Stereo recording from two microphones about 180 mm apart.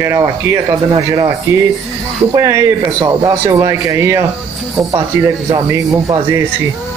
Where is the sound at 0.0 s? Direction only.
15° right (ahead or behind).